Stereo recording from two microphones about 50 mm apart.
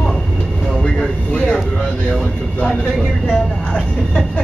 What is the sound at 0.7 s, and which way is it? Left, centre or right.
Vehicle, centre.